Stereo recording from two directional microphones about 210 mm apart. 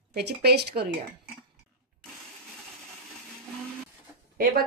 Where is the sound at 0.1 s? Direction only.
50° right (ahead or behind).